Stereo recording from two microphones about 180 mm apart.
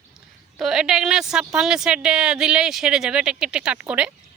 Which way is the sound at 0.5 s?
5° right (ahead or behind).